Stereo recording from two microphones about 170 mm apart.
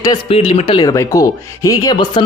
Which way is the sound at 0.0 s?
25° left (ahead or behind).